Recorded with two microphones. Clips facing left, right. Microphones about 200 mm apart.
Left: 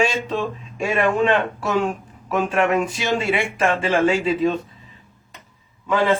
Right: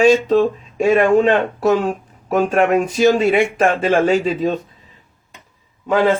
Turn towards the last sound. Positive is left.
turn(degrees=-45)  # may be behind; listen again after turning